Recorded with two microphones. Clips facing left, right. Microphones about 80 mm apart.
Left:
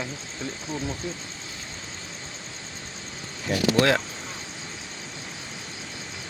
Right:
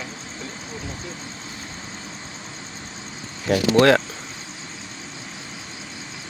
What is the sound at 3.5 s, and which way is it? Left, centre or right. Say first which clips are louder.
Speech: right 6 dB; right.